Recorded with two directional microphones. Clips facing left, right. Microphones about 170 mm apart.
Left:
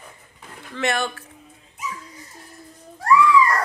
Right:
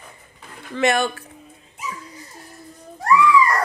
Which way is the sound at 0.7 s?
15° right (ahead or behind).